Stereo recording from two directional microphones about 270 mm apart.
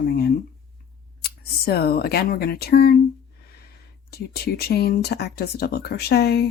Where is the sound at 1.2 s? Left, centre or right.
Left.